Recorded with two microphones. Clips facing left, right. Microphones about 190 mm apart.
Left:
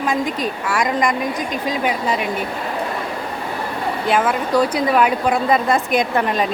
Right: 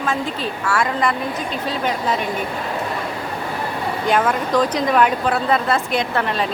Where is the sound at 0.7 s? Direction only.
15° left (ahead or behind).